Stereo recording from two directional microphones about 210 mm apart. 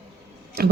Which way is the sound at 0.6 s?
50° right (ahead or behind).